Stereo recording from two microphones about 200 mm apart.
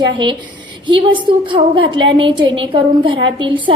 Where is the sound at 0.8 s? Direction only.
25° right (ahead or behind).